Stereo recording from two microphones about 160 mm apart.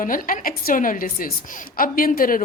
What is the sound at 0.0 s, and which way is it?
A woman's voice, 60° left (ahead or behind).